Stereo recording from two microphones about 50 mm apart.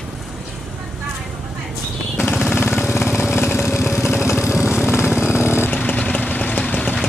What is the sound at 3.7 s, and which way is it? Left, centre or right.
Vehicle, left.